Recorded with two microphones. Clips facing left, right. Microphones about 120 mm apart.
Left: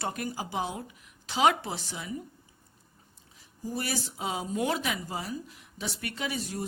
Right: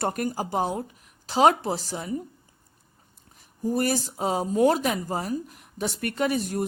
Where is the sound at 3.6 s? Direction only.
50° right (ahead or behind).